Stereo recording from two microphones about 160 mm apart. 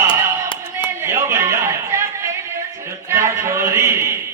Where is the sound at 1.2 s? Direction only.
15° right (ahead or behind).